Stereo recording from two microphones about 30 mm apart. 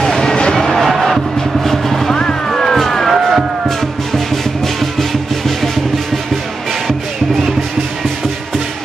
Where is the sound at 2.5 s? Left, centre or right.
Centre.